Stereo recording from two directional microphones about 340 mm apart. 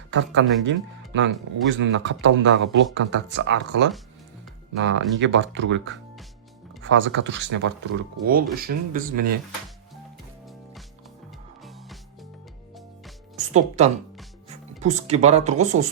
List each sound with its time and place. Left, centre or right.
0.1 s speech: right
13.3 s music: centre
14.8 s speech: right